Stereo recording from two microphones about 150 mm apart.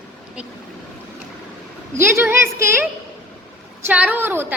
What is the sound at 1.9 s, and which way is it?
A woman's voice, 15° right (ahead or behind).